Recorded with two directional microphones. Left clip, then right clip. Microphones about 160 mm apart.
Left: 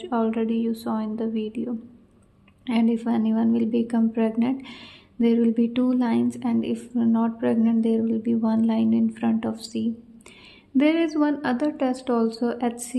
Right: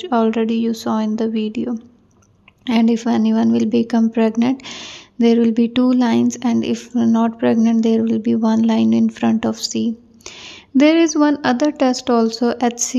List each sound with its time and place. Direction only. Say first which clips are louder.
0.0 s a woman's voice: right 8 dB; 30° right (ahead or behind)